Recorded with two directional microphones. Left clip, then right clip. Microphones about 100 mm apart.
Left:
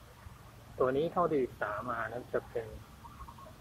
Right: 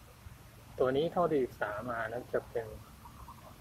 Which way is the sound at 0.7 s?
20° right (ahead or behind).